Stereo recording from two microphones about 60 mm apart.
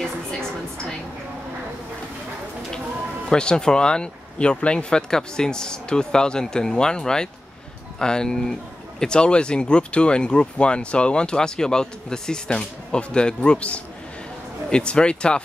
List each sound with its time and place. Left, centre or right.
3.3 s speech: centre